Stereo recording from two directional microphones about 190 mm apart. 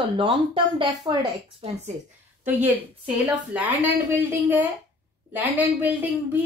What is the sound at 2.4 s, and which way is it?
Speech, 10° right (ahead or behind).